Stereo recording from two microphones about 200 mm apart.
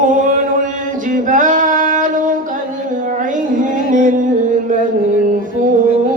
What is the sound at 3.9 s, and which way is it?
Music, 40° right (ahead or behind).